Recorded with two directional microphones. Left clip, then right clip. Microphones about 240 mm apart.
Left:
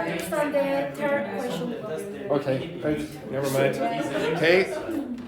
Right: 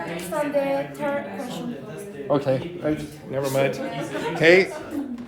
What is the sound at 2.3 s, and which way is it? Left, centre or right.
A man's voice, right.